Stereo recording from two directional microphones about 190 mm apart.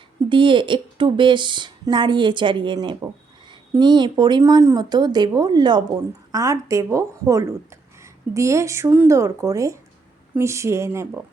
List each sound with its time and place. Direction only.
0.3 s a woman's voice: 25° right (ahead or behind)